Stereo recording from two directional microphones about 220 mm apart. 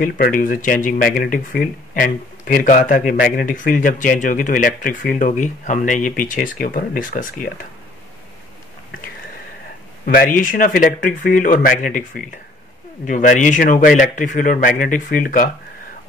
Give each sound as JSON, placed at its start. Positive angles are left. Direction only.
{"t": 0.0, "sound": "speech", "side_deg": 40}
{"t": 10.0, "sound": "speech", "side_deg": 40}